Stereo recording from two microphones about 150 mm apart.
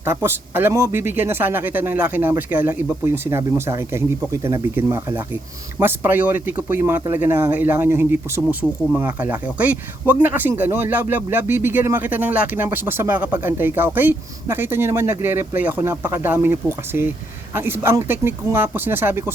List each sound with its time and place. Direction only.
0.0 s speech: 15° right (ahead or behind)